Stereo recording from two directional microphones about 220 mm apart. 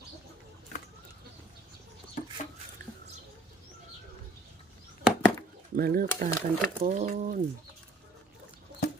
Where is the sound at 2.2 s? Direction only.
35° left (ahead or behind).